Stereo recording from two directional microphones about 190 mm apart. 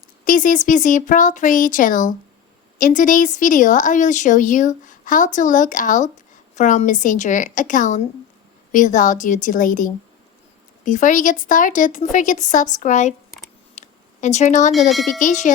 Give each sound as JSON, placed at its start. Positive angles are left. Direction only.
{"t": 0.3, "sound": "speech", "side_deg": 45}
{"t": 13.7, "sound": "a sound", "side_deg": 35}
{"t": 14.7, "sound": "speech", "side_deg": 0}
{"t": 15.2, "sound": "speech", "side_deg": 40}